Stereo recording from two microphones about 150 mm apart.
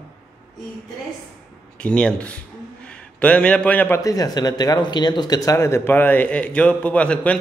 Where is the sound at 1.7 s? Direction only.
5° left (ahead or behind).